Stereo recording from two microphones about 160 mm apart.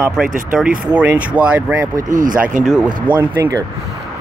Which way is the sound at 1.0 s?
10° right (ahead or behind).